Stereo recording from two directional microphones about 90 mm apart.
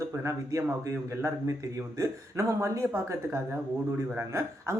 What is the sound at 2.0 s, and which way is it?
Speech, 35° right (ahead or behind).